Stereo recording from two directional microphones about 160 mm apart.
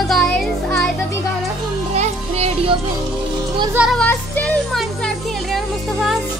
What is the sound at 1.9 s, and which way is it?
Speech, 45° right (ahead or behind).